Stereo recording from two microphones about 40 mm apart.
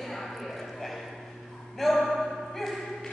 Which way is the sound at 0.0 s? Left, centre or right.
Centre.